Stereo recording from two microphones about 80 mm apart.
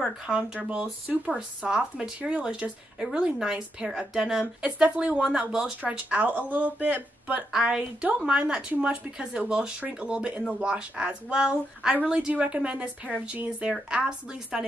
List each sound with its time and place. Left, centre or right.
0.6 s speech: centre